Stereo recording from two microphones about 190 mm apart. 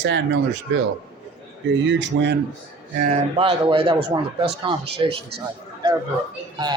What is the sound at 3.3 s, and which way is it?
A man's voice, 30° right (ahead or behind).